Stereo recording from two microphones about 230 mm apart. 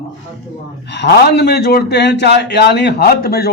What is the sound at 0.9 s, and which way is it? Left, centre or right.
A man's voice, left.